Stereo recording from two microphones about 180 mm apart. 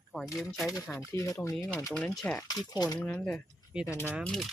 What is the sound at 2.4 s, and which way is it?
Speech, 20° left (ahead or behind).